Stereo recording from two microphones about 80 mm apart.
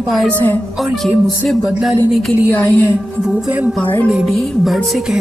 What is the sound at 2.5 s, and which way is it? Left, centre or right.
Speech, left.